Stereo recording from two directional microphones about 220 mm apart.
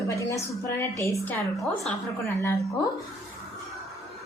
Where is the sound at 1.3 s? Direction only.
5° left (ahead or behind).